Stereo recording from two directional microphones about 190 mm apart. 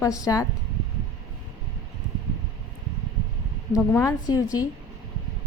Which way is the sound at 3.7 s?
15° left (ahead or behind).